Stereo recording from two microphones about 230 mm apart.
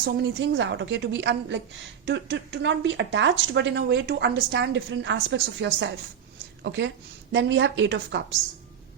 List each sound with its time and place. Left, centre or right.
0.0 s a woman's voice: right